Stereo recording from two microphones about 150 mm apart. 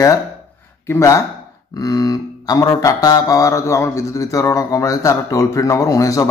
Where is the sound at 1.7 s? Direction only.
25° left (ahead or behind).